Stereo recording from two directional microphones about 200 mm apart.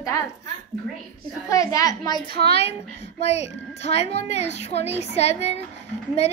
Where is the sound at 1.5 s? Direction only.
15° left (ahead or behind).